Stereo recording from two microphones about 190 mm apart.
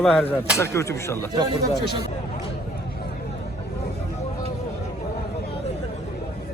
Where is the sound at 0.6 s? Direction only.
15° left (ahead or behind).